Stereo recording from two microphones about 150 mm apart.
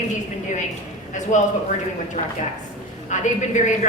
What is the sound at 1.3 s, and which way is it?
Speech, 55° left (ahead or behind).